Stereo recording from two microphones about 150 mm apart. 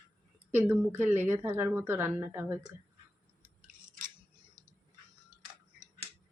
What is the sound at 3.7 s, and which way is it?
Scissors, 60° right (ahead or behind).